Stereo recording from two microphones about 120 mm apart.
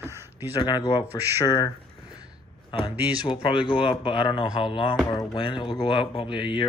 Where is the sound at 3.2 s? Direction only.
50° left (ahead or behind).